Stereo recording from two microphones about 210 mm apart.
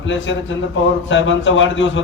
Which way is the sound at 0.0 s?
60° left (ahead or behind).